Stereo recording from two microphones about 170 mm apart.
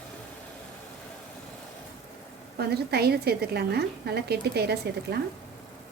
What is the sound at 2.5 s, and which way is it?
A woman's voice, 70° right (ahead or behind).